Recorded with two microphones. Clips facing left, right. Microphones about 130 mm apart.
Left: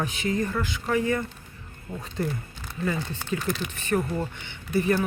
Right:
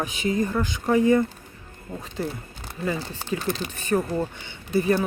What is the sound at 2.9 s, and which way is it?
Speech, 25° right (ahead or behind).